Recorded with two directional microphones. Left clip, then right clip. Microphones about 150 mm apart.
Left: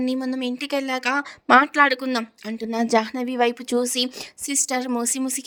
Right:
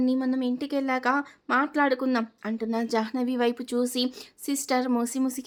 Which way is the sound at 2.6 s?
45° left (ahead or behind).